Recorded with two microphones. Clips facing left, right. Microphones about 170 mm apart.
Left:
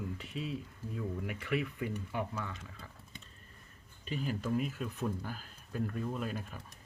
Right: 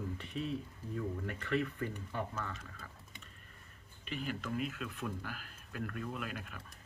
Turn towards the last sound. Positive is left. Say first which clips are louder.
# left 4 dB
turn(degrees=35)  # may be behind; listen again after turning